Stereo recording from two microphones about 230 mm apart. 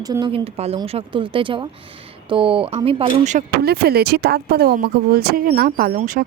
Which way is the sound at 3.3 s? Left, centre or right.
Right.